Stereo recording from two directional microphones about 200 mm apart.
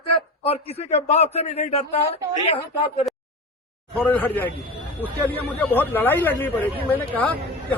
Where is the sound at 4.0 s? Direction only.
10° left (ahead or behind).